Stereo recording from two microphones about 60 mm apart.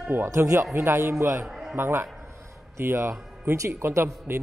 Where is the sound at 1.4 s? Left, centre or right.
Centre.